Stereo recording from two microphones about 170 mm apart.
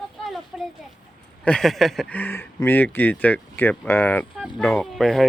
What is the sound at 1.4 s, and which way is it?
Speech, 5° left (ahead or behind).